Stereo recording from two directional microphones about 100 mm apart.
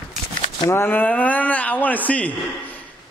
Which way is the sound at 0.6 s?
25° left (ahead or behind).